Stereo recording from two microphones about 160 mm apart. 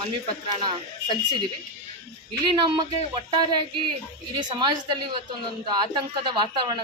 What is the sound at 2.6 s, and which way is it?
A woman's voice, 30° right (ahead or behind).